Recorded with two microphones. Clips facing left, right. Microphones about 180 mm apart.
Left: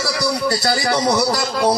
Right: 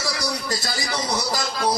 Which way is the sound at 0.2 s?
70° left (ahead or behind).